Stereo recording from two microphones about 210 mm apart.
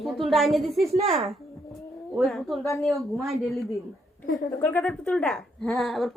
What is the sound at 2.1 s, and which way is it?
A woman's voice, centre (ahead or behind).